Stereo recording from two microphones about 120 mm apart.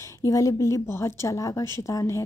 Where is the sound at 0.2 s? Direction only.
30° left (ahead or behind).